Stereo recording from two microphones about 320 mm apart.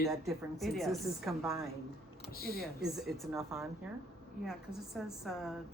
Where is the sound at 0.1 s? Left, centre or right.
Centre.